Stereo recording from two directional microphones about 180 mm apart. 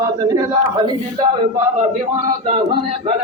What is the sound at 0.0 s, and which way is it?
Speech, 20° right (ahead or behind).